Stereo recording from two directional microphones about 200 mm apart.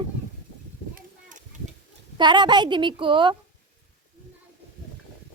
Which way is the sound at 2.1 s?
20° right (ahead or behind).